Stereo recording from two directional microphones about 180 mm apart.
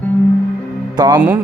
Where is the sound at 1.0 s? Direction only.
20° right (ahead or behind).